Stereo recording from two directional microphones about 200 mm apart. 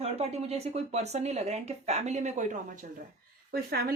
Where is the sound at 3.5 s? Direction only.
50° right (ahead or behind).